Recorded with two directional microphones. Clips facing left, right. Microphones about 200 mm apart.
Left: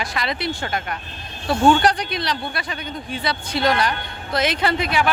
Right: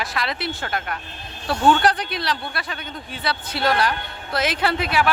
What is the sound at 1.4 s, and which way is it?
Speech, 25° left (ahead or behind).